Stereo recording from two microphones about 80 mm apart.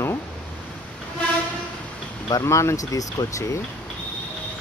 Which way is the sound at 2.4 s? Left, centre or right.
Left.